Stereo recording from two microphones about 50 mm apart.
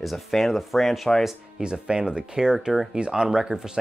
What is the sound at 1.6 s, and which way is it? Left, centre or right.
Speech, centre.